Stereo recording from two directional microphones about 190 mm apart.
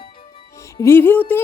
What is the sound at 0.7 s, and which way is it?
Speech, 15° left (ahead or behind).